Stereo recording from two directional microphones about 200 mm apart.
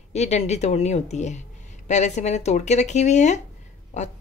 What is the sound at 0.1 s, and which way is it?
A woman's voice, 35° left (ahead or behind).